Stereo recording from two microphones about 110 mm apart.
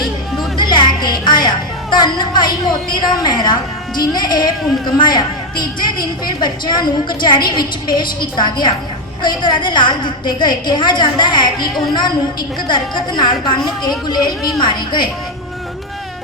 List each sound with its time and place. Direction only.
0.5 s music: 45° left (ahead or behind)
2.9 s a woman's voice: 40° left (ahead or behind)
14.6 s a woman's voice: 45° left (ahead or behind)